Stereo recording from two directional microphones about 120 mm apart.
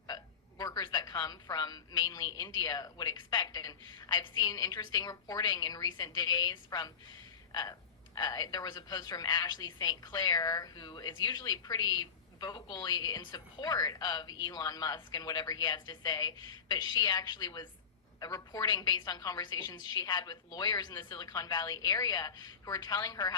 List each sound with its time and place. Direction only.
0.6 s speech: 35° left (ahead or behind)